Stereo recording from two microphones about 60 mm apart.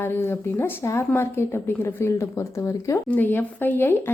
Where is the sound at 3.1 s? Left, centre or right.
Left.